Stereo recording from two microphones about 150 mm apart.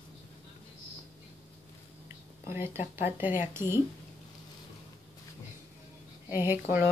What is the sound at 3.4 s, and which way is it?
Speech, 15° right (ahead or behind).